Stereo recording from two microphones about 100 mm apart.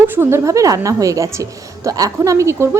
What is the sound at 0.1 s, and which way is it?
A woman's voice, 25° right (ahead or behind).